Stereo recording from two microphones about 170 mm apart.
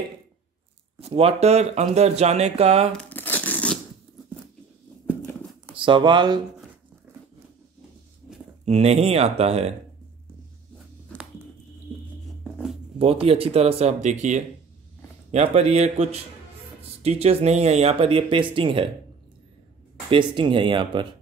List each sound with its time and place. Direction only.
0.9 s speech: 35° right (ahead or behind)
2.9 s tearing: 10° left (ahead or behind)
5.8 s speech: 30° right (ahead or behind)
8.6 s speech: 40° right (ahead or behind)
13.0 s speech: 35° right (ahead or behind)
15.3 s speech: 40° right (ahead or behind)
20.1 s speech: 30° right (ahead or behind)